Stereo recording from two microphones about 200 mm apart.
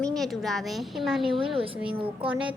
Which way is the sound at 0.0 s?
Centre (ahead or behind).